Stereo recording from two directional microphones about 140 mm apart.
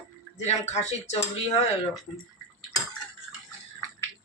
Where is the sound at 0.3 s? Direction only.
55° left (ahead or behind).